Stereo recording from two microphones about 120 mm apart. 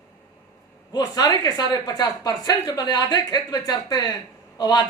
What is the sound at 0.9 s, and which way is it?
A woman's voice, 35° left (ahead or behind).